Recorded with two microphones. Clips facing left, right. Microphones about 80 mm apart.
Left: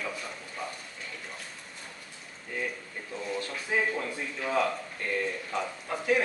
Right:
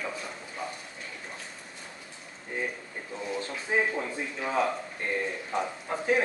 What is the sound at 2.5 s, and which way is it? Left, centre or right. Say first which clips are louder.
A man's voice: right 1 dB; right.